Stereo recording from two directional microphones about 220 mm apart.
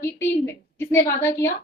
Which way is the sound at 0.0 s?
50° left (ahead or behind).